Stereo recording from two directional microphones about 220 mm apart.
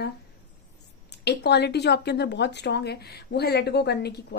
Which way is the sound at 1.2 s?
50° left (ahead or behind).